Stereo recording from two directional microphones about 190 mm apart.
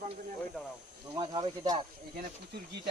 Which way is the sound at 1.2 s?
30° right (ahead or behind).